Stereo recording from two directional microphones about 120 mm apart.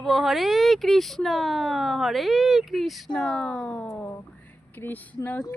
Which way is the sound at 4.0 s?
15° left (ahead or behind).